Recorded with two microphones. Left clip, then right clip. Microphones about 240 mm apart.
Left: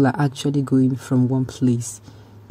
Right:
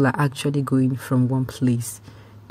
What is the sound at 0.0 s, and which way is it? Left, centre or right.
Speech, right.